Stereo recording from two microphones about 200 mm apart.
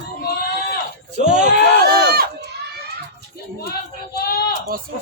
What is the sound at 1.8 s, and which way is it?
Run, 55° right (ahead or behind).